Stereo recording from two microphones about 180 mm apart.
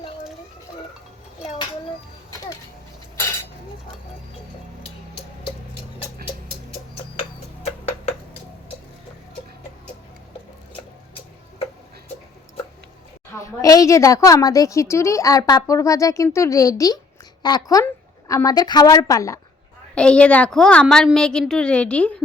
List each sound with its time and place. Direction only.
13.4 s a woman's voice: 20° left (ahead or behind)
20.0 s a woman's voice: 5° left (ahead or behind)